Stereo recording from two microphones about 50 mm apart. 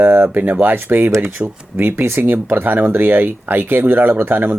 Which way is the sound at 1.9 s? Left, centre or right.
Right.